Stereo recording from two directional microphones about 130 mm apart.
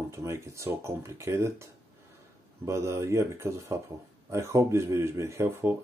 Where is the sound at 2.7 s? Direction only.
20° right (ahead or behind).